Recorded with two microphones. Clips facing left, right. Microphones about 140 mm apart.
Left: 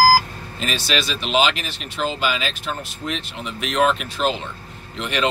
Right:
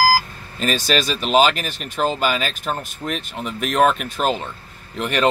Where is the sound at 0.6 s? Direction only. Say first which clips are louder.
Right 4 dB; 45° right (ahead or behind).